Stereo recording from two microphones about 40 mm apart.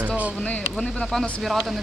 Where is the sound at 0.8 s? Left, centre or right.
Centre.